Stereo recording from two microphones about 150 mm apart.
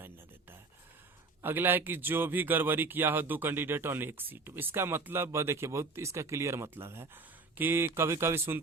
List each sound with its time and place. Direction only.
1.4 s speech: 15° right (ahead or behind)